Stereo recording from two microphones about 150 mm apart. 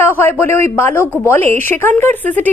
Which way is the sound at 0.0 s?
15° left (ahead or behind).